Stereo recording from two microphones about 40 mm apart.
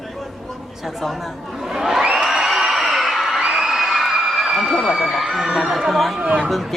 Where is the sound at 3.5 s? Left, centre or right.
Centre.